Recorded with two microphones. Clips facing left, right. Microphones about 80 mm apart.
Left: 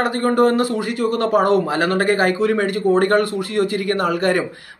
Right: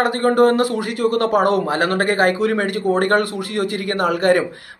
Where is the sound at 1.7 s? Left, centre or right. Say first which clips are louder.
Left 1 dB; right.